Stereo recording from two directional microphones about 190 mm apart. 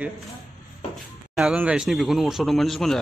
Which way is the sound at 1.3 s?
5° right (ahead or behind).